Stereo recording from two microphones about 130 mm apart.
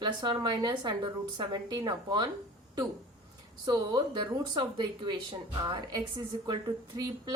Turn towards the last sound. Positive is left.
turn(degrees=-30)  # may be behind; listen again after turning